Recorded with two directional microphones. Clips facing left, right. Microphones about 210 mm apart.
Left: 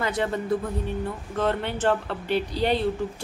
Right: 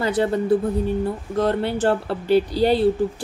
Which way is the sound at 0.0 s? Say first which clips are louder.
Right 6 dB; 35° right (ahead or behind).